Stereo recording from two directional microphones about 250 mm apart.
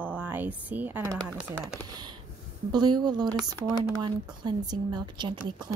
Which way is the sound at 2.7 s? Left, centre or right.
Centre.